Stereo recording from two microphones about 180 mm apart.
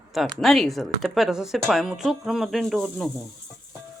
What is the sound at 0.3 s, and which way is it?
Speech, centre (ahead or behind).